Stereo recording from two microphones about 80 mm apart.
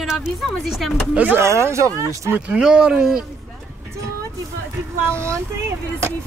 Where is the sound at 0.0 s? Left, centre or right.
Centre.